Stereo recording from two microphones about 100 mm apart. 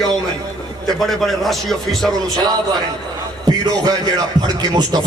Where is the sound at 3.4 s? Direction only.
45° right (ahead or behind).